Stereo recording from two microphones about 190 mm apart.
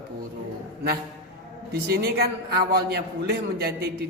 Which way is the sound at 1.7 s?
55° right (ahead or behind).